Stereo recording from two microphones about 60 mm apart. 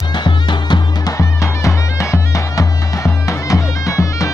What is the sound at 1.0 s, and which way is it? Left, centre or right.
Music, left.